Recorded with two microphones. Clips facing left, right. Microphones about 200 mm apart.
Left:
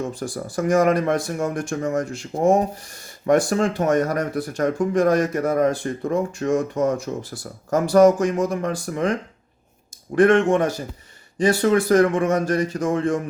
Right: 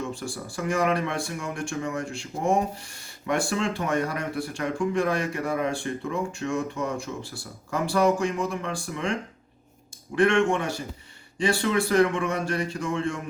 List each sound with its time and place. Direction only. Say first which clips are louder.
0.1 s speech: left 5 dB; 40° left (ahead or behind)
10.2 s speech: left 6 dB; 40° left (ahead or behind)